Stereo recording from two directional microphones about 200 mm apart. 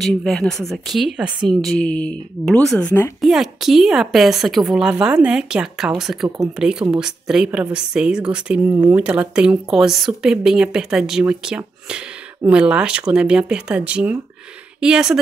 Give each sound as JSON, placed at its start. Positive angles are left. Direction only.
{"t": 0.0, "sound": "speech", "side_deg": 5}
{"t": 6.2, "sound": "speech", "side_deg": -15}
{"t": 6.5, "sound": "speech", "side_deg": -5}